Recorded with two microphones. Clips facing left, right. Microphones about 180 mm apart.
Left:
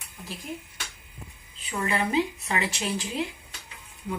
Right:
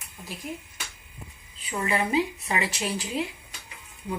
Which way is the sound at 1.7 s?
15° right (ahead or behind).